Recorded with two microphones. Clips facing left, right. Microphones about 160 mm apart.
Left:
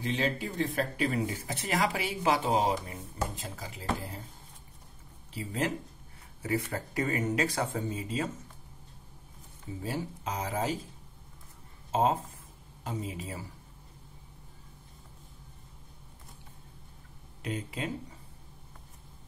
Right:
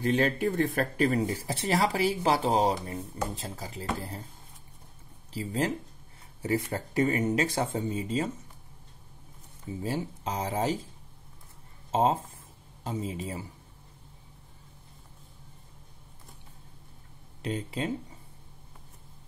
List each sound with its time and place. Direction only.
0.0 s speech: 50° right (ahead or behind); by 3.8 s 35° right (ahead or behind)
5.3 s speech: 30° right (ahead or behind)
9.8 s speech: 30° right (ahead or behind)
11.9 s speech: 30° right (ahead or behind)
17.4 s speech: 30° right (ahead or behind)